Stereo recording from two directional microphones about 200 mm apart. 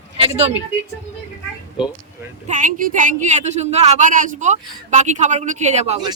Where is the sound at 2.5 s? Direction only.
40° right (ahead or behind).